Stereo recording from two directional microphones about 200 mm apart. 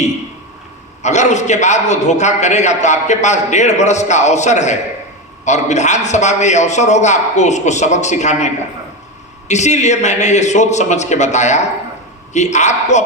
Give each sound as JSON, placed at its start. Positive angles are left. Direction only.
{"t": 1.0, "sound": "a man's voice", "side_deg": 35}
{"t": 9.5, "sound": "a man's voice", "side_deg": 35}